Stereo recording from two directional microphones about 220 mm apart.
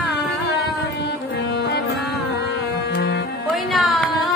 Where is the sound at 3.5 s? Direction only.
Centre (ahead or behind).